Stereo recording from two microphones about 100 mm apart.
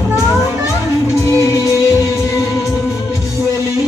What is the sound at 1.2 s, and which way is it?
Music, 30° left (ahead or behind).